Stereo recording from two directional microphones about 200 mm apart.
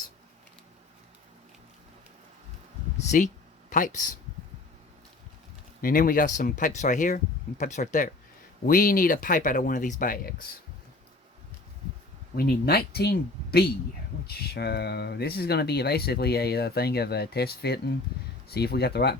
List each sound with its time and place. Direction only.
3.7 s speech: 40° left (ahead or behind)
5.8 s speech: 45° left (ahead or behind)
12.4 s speech: 50° left (ahead or behind)